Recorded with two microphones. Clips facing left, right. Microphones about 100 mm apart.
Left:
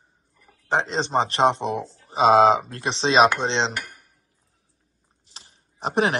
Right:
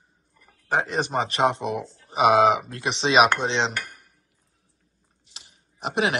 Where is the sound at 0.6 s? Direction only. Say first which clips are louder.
Left 1 dB; 25° left (ahead or behind).